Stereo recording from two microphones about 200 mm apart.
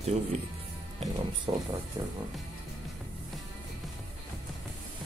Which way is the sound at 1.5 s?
15° right (ahead or behind).